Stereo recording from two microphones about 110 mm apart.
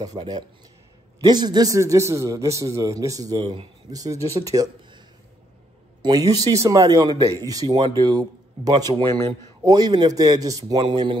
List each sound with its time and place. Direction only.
0.0 s a man's voice: 40° right (ahead or behind)
6.0 s a man's voice: 35° right (ahead or behind)
7.6 s a man's voice: 45° right (ahead or behind)